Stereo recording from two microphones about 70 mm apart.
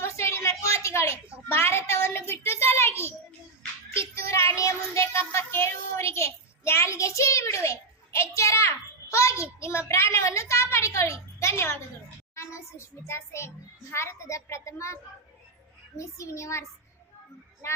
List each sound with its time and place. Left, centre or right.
0.0 s a sound: left
3.9 s child singing: left
13.9 s a woman's voice: left
16.0 s a woman's voice: left